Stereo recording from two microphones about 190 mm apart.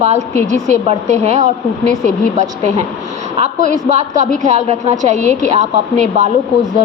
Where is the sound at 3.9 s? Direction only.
40° right (ahead or behind).